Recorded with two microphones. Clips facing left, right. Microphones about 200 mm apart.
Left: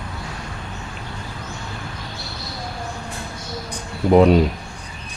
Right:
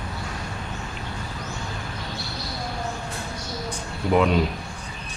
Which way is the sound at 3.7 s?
40° left (ahead or behind).